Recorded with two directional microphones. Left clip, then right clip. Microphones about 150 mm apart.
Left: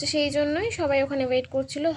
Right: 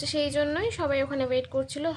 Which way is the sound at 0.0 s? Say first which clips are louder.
Left 2 dB; 15° left (ahead or behind).